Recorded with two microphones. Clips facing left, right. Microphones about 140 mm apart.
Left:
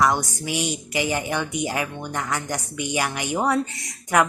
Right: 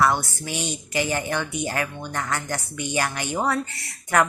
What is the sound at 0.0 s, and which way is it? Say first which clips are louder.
A woman's voice: even; 15° left (ahead or behind).